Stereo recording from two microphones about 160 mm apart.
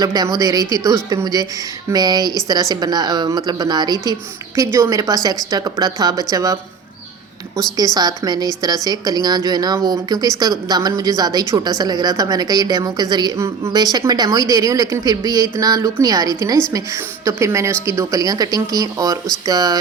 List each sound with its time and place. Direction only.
0.0 s a woman's voice: 25° right (ahead or behind)
7.9 s a woman's voice: 25° right (ahead or behind)